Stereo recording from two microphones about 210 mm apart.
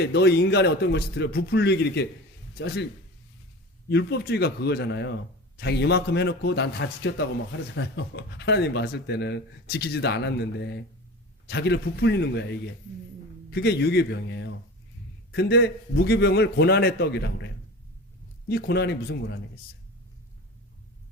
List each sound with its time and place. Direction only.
0.0 s speech: 55° left (ahead or behind)
3.8 s a man's voice: 50° left (ahead or behind)
13.5 s speech: 50° left (ahead or behind)